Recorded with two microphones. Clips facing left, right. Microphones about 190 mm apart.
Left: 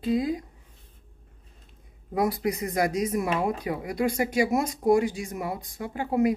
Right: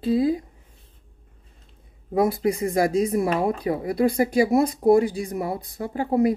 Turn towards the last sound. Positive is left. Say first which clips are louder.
# right 3 dB
turn(degrees=-35)  # may be behind; listen again after turning